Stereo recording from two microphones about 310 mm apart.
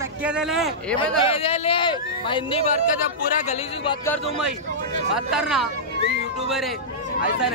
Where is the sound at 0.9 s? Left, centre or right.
Centre.